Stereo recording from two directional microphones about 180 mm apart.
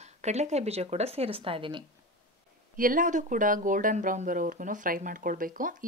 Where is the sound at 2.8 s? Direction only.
50° right (ahead or behind).